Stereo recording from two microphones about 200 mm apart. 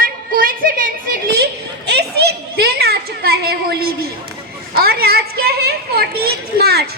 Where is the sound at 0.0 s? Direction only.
45° right (ahead or behind).